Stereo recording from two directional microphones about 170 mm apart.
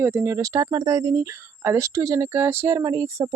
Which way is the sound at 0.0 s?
15° right (ahead or behind).